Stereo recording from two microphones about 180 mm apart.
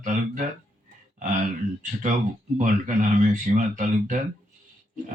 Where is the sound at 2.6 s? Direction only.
45° right (ahead or behind).